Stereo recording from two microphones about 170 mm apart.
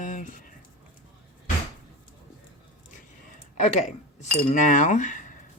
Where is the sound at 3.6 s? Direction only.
40° left (ahead or behind).